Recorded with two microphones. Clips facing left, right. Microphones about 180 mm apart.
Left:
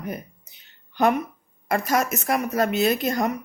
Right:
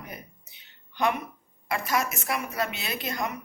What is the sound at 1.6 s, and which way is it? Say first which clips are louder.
A woman's voice: left 5 dB; 45° left (ahead or behind).